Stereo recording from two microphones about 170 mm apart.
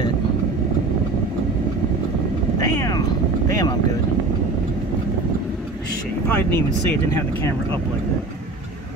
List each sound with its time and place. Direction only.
2.6 s vehicle: 20° left (ahead or behind)
6.2 s speech: 10° left (ahead or behind)